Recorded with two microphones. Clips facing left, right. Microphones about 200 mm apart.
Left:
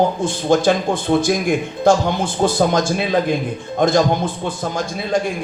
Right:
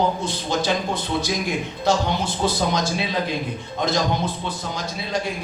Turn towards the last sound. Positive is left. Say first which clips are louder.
# left 7 dB
turn(degrees=50)  # may be behind; listen again after turning